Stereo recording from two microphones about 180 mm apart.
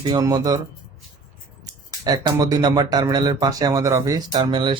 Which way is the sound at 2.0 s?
20° right (ahead or behind).